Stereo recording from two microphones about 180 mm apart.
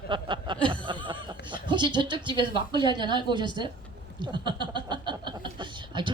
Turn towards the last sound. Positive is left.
turn(degrees=-25)  # may be behind; listen again after turning